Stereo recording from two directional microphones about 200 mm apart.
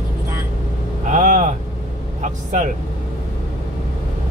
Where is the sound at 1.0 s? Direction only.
40° right (ahead or behind).